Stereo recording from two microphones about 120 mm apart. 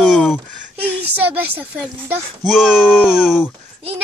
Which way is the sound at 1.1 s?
15° right (ahead or behind).